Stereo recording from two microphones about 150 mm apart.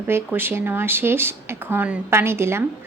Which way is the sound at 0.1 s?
15° right (ahead or behind).